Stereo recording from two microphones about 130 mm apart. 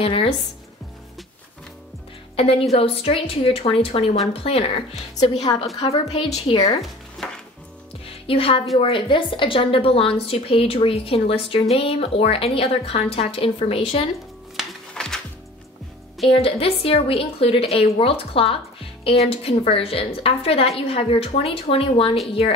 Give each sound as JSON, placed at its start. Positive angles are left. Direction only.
{"t": 0.0, "sound": "a woman's voice", "side_deg": 45}
{"t": 2.3, "sound": "a woman's voice", "side_deg": 50}
{"t": 8.3, "sound": "a woman's voice", "side_deg": 45}
{"t": 14.6, "sound": "music", "side_deg": 5}
{"t": 16.3, "sound": "a woman's voice", "side_deg": 50}